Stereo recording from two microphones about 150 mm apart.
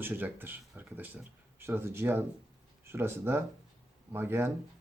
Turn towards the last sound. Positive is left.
turn(degrees=-15)  # may be behind; listen again after turning